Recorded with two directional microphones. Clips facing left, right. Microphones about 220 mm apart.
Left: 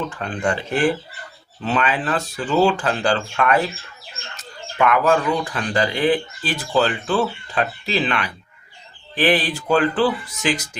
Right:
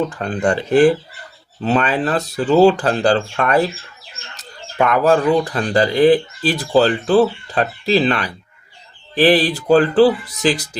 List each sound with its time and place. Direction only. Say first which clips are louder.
0.2 s speech: right 5 dB; 35° right (ahead or behind)